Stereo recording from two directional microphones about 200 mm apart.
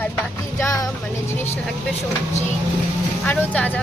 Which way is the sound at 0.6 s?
15° left (ahead or behind).